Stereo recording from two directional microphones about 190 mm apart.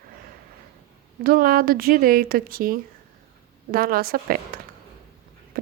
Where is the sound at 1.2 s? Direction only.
50° right (ahead or behind).